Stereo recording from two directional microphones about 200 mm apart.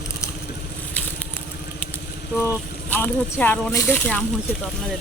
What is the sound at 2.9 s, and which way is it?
Speech, 10° left (ahead or behind).